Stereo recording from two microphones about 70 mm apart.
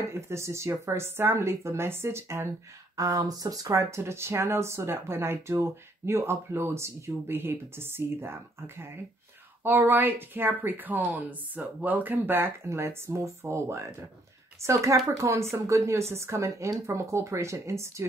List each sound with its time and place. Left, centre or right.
0.1 s speech: right
3.0 s a woman's voice: right